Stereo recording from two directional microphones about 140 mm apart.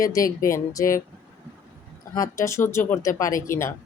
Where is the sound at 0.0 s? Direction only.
25° left (ahead or behind).